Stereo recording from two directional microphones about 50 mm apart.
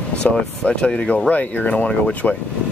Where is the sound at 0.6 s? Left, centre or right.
Left.